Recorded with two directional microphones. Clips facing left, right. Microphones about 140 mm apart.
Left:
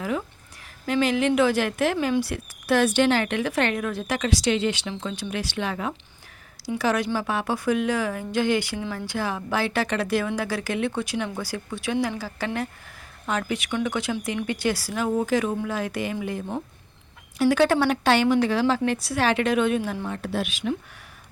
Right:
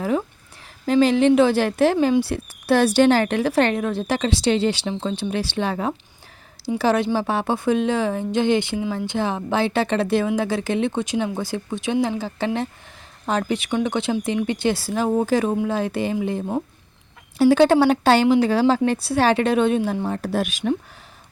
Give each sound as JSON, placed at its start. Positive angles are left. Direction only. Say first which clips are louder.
{"t": 0.0, "sound": "a sound", "louder": "right 5 dB", "side_deg": -35}
{"t": 0.9, "sound": "speech", "louder": "right 6 dB", "side_deg": -35}
{"t": 17.3, "sound": "speech", "louder": "right 5 dB", "side_deg": -30}